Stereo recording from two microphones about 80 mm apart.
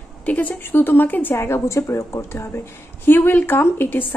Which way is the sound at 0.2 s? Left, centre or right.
Centre.